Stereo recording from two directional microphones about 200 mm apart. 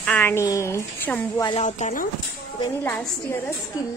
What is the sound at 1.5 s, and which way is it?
Speech, 35° left (ahead or behind).